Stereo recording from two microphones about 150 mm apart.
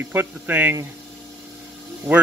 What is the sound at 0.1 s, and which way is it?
Speech, 10° right (ahead or behind).